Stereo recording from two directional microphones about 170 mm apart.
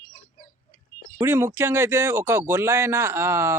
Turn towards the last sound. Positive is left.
turn(degrees=-15)  # may be behind; listen again after turning